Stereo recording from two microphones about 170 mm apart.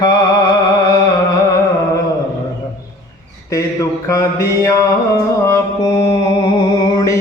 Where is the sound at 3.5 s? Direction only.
20° left (ahead or behind).